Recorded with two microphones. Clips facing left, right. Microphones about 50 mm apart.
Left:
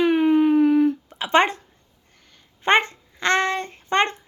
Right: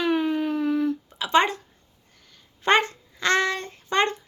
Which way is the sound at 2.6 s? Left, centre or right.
Left.